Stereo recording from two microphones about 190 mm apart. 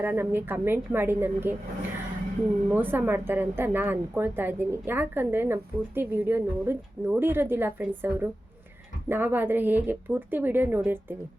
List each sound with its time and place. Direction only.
0.0 s a woman's voice: 10° right (ahead or behind)
2.6 s a woman's voice: 10° right (ahead or behind)